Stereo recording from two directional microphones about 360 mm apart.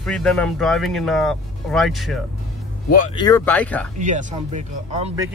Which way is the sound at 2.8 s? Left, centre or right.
Left.